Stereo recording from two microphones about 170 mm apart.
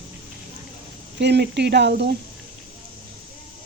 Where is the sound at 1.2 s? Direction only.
85° right.